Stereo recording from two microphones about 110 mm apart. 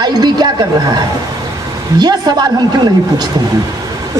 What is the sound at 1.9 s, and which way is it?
Speech, 40° right (ahead or behind).